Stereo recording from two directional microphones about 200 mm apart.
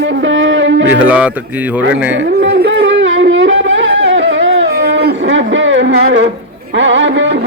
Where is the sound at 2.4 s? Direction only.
55° right (ahead or behind).